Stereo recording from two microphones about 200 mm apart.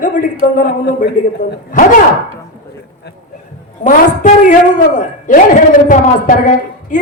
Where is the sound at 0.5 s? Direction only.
45° left (ahead or behind).